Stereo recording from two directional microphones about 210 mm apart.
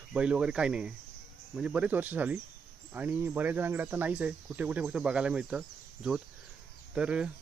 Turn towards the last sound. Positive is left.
turn(degrees=-5)  # may be behind; listen again after turning